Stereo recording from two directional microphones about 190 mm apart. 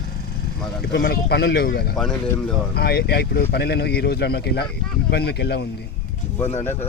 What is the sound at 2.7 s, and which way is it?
Speech, 55° left (ahead or behind).